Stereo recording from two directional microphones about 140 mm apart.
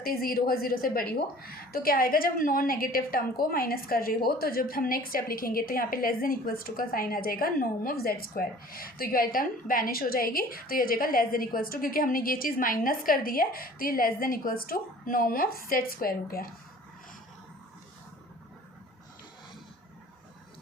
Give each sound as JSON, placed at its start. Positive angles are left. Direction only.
{"t": 0.0, "sound": "a woman's voice", "side_deg": 90}